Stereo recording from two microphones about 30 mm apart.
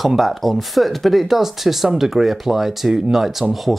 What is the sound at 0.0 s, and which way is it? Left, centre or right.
Speech, centre.